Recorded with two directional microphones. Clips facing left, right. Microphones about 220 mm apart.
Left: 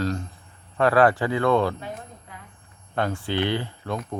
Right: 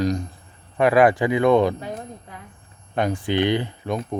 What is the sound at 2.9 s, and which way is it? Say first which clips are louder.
Speech: right 4 dB; 15° right (ahead or behind).